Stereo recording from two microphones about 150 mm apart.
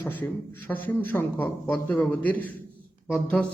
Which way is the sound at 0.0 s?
15° left (ahead or behind).